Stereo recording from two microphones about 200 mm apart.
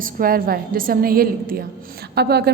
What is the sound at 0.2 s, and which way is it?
A woman's voice, 45° right (ahead or behind).